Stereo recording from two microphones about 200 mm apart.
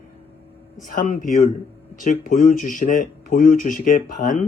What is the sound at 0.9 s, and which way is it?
Speech, 40° left (ahead or behind).